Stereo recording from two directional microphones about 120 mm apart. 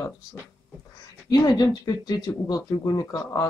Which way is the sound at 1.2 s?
35° left (ahead or behind).